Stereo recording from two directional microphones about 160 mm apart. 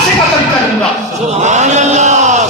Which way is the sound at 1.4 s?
45° right (ahead or behind).